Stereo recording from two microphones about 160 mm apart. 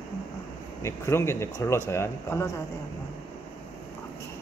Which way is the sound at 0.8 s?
15° left (ahead or behind).